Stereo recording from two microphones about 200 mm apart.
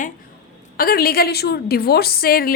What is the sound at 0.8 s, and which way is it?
A woman's voice, 50° left (ahead or behind).